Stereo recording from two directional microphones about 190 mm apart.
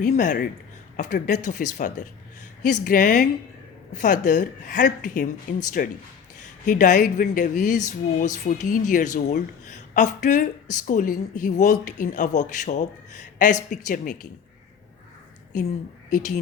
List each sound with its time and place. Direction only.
0.0 s a woman's voice: 45° left (ahead or behind)
15.5 s speech: 40° left (ahead or behind)